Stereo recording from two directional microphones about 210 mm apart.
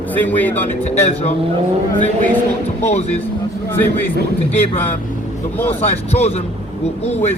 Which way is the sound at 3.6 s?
10° left (ahead or behind).